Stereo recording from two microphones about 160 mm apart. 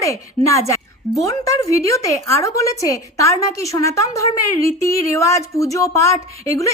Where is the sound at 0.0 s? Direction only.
20° left (ahead or behind).